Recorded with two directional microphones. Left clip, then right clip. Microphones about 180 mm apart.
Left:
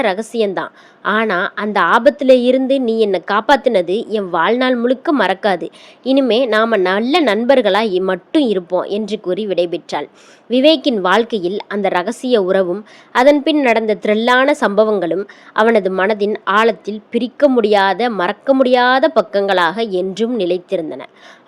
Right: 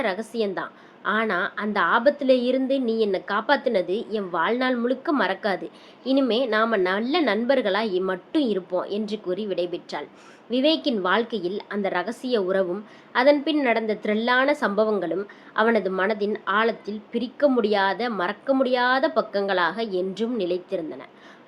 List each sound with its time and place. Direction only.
0.0 s a woman's voice: 45° left (ahead or behind)